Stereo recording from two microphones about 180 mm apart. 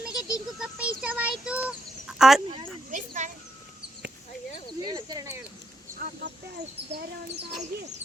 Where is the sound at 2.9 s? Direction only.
45° right (ahead or behind).